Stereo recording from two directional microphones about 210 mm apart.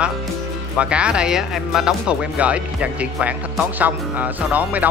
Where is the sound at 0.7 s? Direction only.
5° right (ahead or behind).